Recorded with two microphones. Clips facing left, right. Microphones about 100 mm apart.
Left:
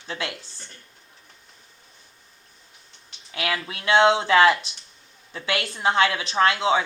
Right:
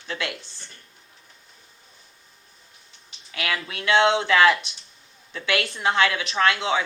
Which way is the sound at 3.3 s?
25° left (ahead or behind).